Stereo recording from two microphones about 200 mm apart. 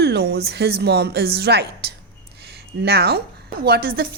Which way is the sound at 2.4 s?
55° right (ahead or behind).